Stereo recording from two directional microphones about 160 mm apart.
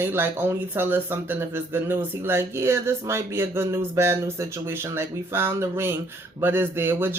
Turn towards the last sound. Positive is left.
turn(degrees=-15)  # may be behind; listen again after turning